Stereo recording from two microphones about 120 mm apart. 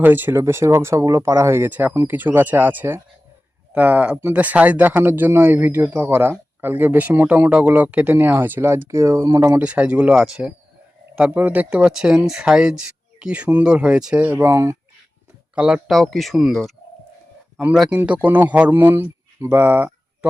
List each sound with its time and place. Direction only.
0.0 s speech: 15° right (ahead or behind)
9.6 s speech: 10° right (ahead or behind); by 14.8 s 25° right (ahead or behind)
15.5 s speech: 5° right (ahead or behind)
17.7 s speech: 5° right (ahead or behind)